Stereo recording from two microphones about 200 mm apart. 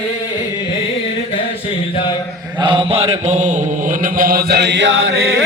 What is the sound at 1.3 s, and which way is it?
Mantra, 25° left (ahead or behind).